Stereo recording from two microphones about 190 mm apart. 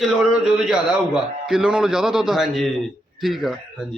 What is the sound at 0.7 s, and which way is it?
A man's voice, 5° right (ahead or behind).